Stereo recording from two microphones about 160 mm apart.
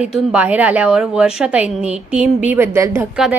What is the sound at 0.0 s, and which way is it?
A woman's voice, 5° right (ahead or behind).